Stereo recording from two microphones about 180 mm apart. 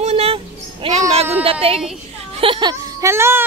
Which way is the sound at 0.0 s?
35° right (ahead or behind).